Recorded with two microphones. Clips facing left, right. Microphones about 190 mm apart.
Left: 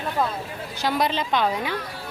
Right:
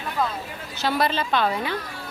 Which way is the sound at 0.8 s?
15° left (ahead or behind).